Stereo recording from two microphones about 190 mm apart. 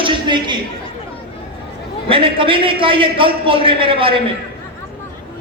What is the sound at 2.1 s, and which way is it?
A man's voice, 30° right (ahead or behind).